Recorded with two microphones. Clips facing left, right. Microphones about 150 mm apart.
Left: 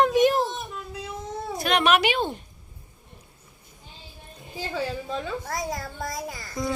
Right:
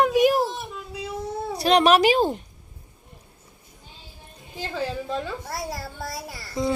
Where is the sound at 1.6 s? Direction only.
35° right (ahead or behind).